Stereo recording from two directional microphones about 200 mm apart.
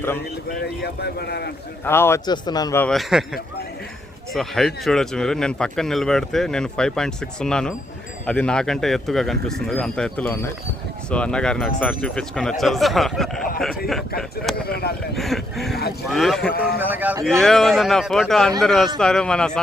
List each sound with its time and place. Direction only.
0.2 s speech: 55° left (ahead or behind)
1.8 s speech: 10° left (ahead or behind)
2.8 s speech: centre (ahead or behind)
4.4 s speech: centre (ahead or behind)
14.7 s speech: 50° left (ahead or behind)
15.1 s a man's voice: centre (ahead or behind)
17.3 s speech: centre (ahead or behind)